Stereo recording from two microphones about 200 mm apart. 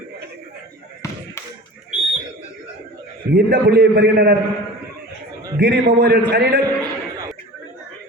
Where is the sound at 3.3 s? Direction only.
50° right (ahead or behind).